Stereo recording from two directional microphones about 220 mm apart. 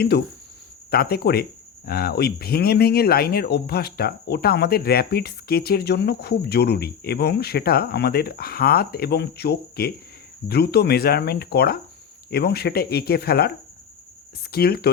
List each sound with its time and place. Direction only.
0.9 s speech: 45° left (ahead or behind)
14.5 s speech: 45° left (ahead or behind)